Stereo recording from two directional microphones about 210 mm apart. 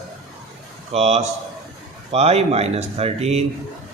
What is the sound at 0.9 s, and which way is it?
Speech, 30° right (ahead or behind).